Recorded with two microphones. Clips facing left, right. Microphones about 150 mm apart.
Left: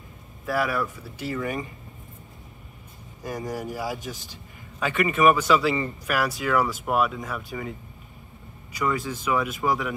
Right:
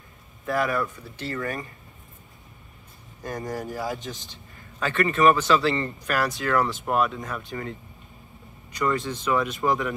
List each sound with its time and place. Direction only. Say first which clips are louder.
0.5 s speech: right 1 dB; 5° left (ahead or behind)
1.4 s speech: left 1 dB; 20° left (ahead or behind)
3.2 s speech: even; centre (ahead or behind)
4.1 s a man's voice: even; 20° right (ahead or behind)
4.7 s a man's voice: even; 15° left (ahead or behind)
8.7 s speech: right 1 dB; centre (ahead or behind)